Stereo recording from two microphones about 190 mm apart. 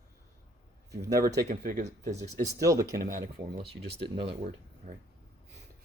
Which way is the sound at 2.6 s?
15° right (ahead or behind).